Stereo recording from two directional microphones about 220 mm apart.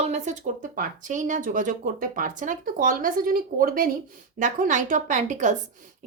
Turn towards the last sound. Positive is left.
turn(degrees=-35)  # may be behind; listen again after turning